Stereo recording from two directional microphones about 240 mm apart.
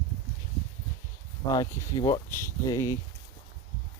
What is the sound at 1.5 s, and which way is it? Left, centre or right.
Speech, centre.